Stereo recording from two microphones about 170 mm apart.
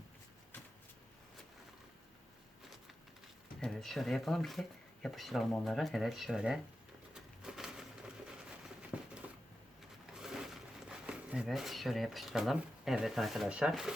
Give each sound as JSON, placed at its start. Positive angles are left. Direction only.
{"t": 3.6, "sound": "speech", "side_deg": 0}
{"t": 7.1, "sound": "pigeon", "side_deg": -5}
{"t": 8.9, "sound": "a sound", "side_deg": -5}
{"t": 10.1, "sound": "speech", "side_deg": -5}